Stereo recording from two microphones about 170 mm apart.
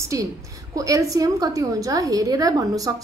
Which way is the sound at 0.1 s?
20° right (ahead or behind).